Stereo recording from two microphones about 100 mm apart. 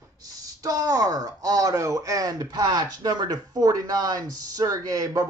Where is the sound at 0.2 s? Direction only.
35° right (ahead or behind).